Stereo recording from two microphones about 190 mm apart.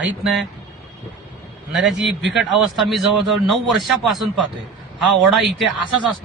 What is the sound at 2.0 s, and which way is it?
Speech, 65° right (ahead or behind).